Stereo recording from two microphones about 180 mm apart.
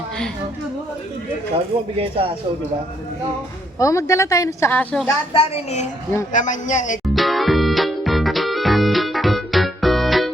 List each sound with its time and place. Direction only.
1.5 s speech: 30° right (ahead or behind)
3.8 s a woman's voice: 20° left (ahead or behind)
5.3 s a woman's voice: 35° left (ahead or behind)
7.0 s music: centre (ahead or behind)